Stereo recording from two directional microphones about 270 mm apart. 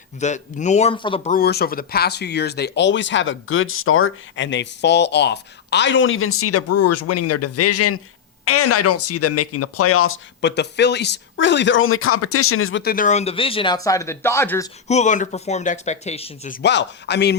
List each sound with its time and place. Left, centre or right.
0.2 s speech: left
12.8 s speech: left; by 14.7 s centre
14.8 s speech: left